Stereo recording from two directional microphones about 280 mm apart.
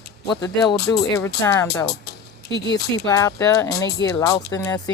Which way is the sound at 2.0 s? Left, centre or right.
Left.